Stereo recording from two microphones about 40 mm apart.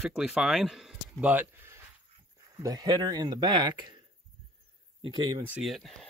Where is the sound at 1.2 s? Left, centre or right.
Right.